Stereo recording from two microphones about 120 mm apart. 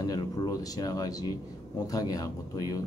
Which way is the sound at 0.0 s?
30° left (ahead or behind).